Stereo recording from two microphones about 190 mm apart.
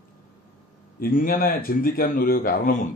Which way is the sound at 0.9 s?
50° left (ahead or behind).